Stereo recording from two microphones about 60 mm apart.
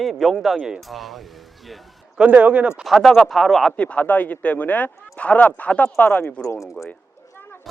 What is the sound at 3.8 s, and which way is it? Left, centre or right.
Speech, left.